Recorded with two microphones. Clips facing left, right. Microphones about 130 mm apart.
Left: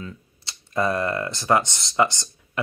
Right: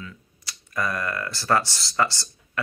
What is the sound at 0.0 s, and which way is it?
Speech, 25° left (ahead or behind).